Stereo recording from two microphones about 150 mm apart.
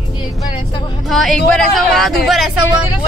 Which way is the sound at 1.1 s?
Centre (ahead or behind).